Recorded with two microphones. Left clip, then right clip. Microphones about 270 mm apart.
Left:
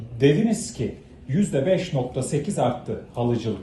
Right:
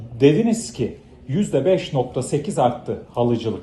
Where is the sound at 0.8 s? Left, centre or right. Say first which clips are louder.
Right 4 dB; right.